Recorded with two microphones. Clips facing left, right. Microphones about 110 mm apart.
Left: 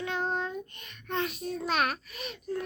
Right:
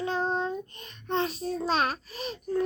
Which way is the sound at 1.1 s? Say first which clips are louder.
Right 3 dB; 30° right (ahead or behind).